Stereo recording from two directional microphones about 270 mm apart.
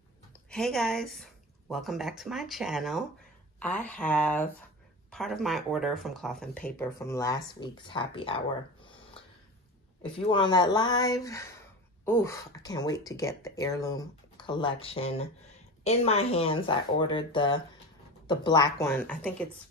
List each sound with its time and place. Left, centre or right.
0.5 s speech: centre
10.1 s speech: centre